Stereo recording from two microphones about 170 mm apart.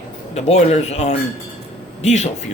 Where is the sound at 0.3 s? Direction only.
40° left (ahead or behind).